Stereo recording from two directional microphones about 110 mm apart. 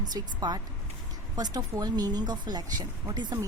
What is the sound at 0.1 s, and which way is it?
Speech, 40° right (ahead or behind).